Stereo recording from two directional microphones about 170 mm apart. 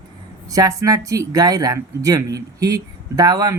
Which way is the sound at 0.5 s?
20° right (ahead or behind).